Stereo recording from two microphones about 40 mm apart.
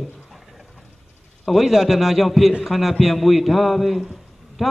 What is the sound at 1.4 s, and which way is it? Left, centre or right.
A man's voice, centre.